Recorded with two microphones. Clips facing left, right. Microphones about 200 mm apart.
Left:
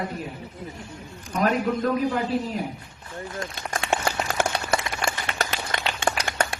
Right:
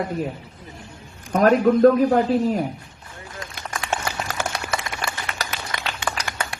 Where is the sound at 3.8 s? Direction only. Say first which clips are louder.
Left 2 dB; 30° left (ahead or behind).